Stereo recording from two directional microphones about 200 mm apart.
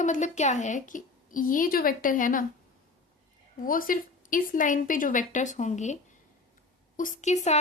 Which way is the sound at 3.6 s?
45° left (ahead or behind).